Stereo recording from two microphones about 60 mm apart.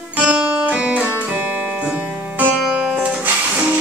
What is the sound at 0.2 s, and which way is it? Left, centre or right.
Music, centre.